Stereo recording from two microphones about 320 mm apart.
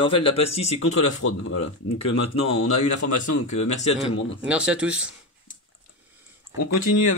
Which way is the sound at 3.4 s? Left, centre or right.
Left.